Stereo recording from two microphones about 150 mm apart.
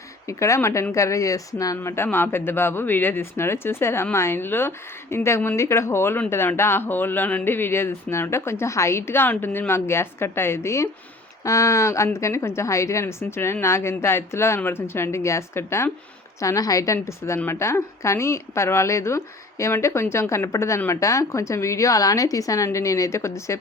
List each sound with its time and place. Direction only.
0.3 s a woman's voice: 20° left (ahead or behind)